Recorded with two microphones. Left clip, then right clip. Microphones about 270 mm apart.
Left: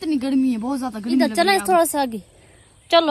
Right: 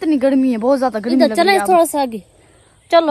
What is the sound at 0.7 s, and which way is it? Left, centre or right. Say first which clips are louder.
Speech: right 11 dB; centre.